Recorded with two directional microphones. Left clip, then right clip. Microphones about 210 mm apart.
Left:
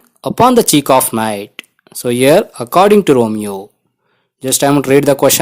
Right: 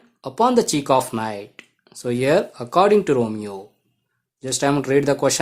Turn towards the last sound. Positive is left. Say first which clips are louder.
# left 9 dB
turn(degrees=35)  # may be behind; listen again after turning